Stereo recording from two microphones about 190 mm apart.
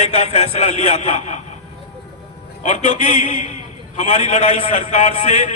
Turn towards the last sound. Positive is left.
turn(degrees=40)  # may be behind; listen again after turning